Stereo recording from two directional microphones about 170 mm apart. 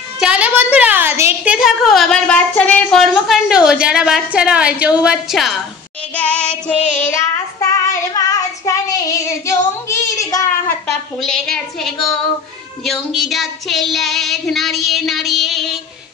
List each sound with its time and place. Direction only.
0.2 s a woman's voice: 5° right (ahead or behind)
6.1 s child singing: 5° left (ahead or behind)
6.8 s child singing: 45° left (ahead or behind)
7.1 s child singing: 15° left (ahead or behind)
11.1 s a woman's voice: 5° left (ahead or behind)